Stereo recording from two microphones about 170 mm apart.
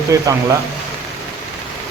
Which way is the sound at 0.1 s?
20° right (ahead or behind).